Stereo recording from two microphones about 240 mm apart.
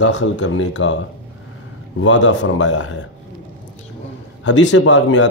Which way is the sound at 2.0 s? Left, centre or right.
Left.